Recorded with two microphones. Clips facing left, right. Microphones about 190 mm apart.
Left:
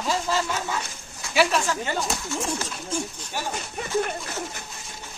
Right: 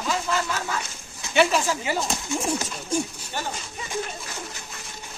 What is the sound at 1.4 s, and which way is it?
Speech, centre (ahead or behind).